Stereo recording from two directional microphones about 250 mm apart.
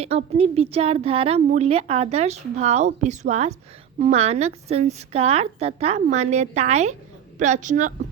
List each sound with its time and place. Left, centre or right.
0.0 s a woman's voice: right